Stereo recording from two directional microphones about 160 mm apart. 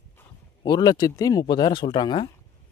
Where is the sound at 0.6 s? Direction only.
25° left (ahead or behind).